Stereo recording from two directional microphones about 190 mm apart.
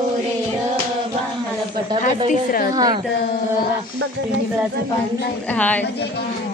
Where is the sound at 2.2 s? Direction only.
45° left (ahead or behind).